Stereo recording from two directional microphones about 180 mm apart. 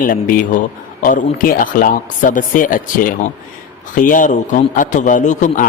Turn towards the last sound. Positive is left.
turn(degrees=45)  # may be behind; listen again after turning